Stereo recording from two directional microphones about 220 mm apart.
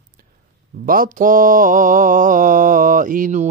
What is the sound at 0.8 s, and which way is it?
Mantra, 40° right (ahead or behind).